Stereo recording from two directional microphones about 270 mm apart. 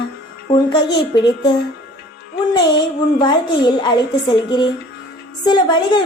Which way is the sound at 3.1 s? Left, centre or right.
Centre.